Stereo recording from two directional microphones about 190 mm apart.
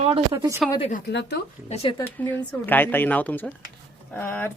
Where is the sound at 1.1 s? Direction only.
65° left (ahead or behind).